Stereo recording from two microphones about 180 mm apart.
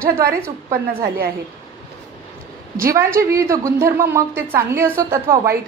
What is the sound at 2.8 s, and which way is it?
A woman's voice, 15° right (ahead or behind).